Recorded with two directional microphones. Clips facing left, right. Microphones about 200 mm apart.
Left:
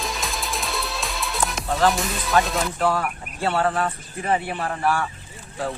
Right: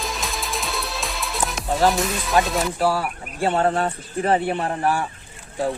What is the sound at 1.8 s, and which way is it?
Speech, centre (ahead or behind).